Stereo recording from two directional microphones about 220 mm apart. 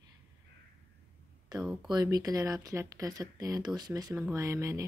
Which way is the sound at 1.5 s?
20° right (ahead or behind).